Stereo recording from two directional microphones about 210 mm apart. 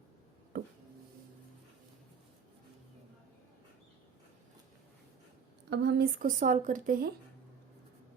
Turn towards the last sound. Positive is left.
turn(degrees=-40)  # may be behind; listen again after turning